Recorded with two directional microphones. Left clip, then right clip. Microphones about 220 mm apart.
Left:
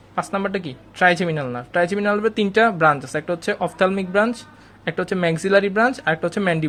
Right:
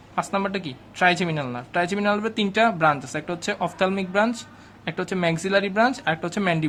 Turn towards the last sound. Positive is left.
turn(degrees=15)  # may be behind; listen again after turning